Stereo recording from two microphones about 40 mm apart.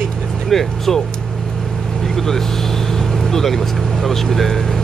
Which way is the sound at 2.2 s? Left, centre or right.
Centre.